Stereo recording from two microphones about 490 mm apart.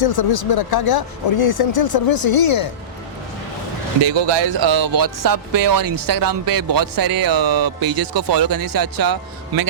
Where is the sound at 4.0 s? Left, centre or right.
Right.